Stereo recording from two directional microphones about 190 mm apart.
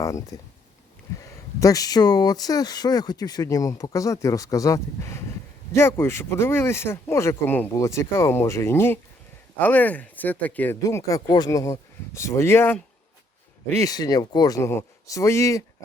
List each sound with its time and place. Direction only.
0.0 s speech: 15° left (ahead or behind)